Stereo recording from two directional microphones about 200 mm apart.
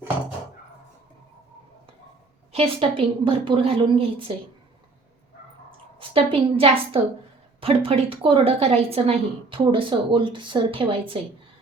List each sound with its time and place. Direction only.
2.5 s a woman's voice: 30° right (ahead or behind)
6.0 s a woman's voice: 25° right (ahead or behind)